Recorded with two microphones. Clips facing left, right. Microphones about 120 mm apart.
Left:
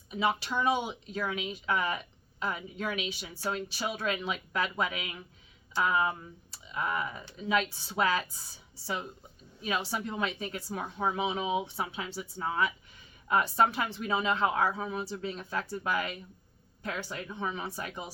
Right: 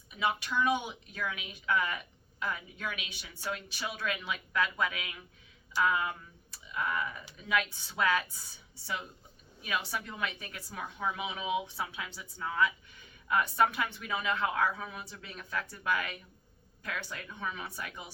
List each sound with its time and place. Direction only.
0.1 s a woman's voice: 35° left (ahead or behind)